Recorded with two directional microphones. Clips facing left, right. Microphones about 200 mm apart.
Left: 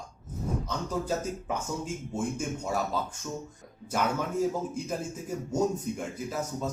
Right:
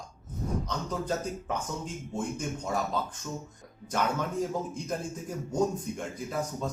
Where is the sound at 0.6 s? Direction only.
10° left (ahead or behind).